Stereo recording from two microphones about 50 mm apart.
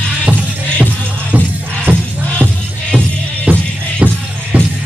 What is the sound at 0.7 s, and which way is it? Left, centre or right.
Music, right.